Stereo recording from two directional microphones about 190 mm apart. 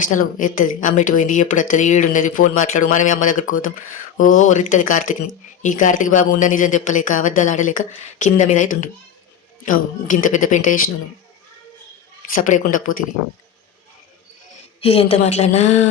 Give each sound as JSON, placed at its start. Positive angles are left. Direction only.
{"t": 0.1, "sound": "speech", "side_deg": 45}
{"t": 12.3, "sound": "speech", "side_deg": 45}
{"t": 14.8, "sound": "a woman's voice", "side_deg": 30}